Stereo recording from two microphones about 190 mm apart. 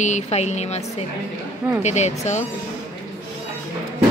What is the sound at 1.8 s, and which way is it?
Speech, 35° left (ahead or behind).